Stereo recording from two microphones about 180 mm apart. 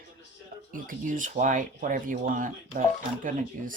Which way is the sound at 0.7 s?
50° right (ahead or behind).